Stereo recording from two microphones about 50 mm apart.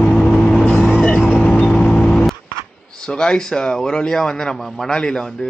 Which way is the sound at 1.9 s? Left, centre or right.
Centre.